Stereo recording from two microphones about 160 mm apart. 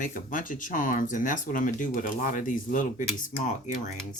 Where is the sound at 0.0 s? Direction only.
55° left (ahead or behind).